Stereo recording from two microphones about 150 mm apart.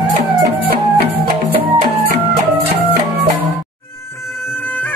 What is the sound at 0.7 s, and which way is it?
Music, 90° right.